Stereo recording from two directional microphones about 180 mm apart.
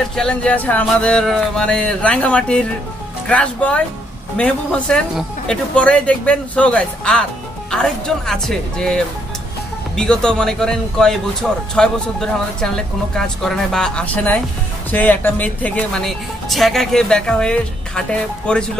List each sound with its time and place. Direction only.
0.1 s speech: 5° left (ahead or behind)